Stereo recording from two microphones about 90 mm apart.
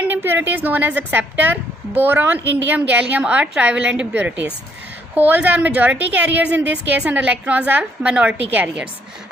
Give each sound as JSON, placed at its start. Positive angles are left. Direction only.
{"t": 0.0, "sound": "a woman's voice", "side_deg": -25}